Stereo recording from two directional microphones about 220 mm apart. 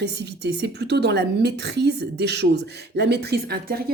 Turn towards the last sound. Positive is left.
turn(degrees=-45)  # may be behind; listen again after turning